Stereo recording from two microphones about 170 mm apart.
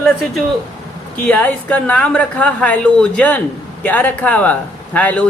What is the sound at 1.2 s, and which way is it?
Speech, 10° left (ahead or behind).